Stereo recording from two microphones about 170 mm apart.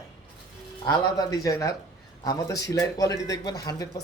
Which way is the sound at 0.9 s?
20° left (ahead or behind).